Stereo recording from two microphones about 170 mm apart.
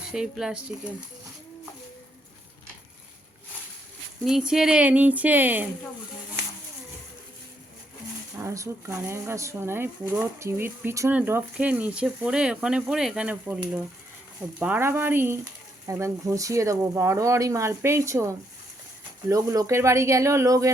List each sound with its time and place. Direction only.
0.1 s speech: 5° right (ahead or behind)
4.3 s speech: 5° right (ahead or behind)
8.4 s speech: 15° right (ahead or behind)